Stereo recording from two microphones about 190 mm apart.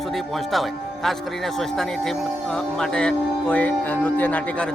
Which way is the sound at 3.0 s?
5° left (ahead or behind).